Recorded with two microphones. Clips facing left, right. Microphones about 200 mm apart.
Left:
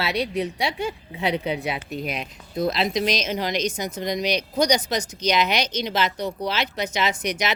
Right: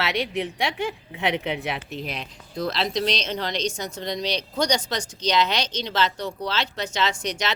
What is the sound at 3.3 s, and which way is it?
Speech, 10° left (ahead or behind).